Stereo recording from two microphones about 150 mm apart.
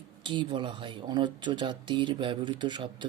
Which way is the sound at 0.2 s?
30° right (ahead or behind).